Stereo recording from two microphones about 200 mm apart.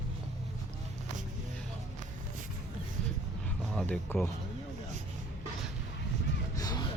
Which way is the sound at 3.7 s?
5° left (ahead or behind).